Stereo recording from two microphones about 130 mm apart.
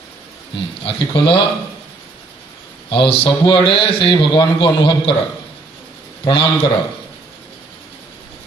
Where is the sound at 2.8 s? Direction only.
45° left (ahead or behind).